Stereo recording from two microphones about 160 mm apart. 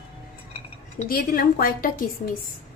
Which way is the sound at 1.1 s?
65° left (ahead or behind).